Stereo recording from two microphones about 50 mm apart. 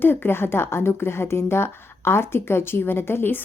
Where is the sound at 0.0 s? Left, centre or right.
Left.